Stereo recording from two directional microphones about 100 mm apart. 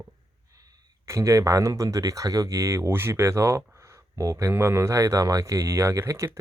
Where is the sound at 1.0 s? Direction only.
30° right (ahead or behind).